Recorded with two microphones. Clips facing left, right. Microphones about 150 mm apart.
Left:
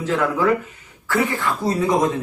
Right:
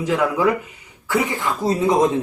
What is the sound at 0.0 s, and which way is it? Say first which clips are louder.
Speech: right 1 dB; 15° right (ahead or behind).